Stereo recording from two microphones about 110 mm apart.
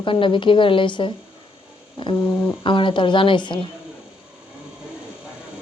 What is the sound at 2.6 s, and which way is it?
A woman's voice, 50° left (ahead or behind).